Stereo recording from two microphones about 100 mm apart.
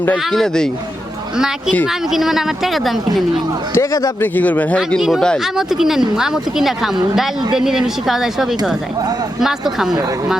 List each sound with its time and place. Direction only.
0.3 s a woman's voice: 5° left (ahead or behind)
1.9 s a woman's voice: 5° right (ahead or behind)
3.8 s speech: 35° left (ahead or behind)
4.2 s speech: 15° left (ahead or behind)
4.9 s a woman's voice: 5° right (ahead or behind)
9.7 s a woman's voice: 5° right (ahead or behind)